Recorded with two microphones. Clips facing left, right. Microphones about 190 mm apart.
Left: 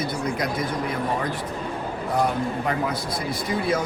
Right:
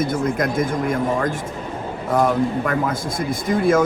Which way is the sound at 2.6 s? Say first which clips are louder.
Right 3 dB; 50° right (ahead or behind).